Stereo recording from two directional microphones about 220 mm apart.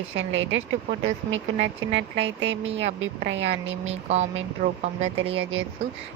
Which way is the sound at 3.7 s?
30° right (ahead or behind).